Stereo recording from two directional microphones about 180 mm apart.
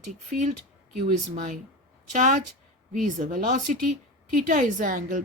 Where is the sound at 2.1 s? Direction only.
45° right (ahead or behind).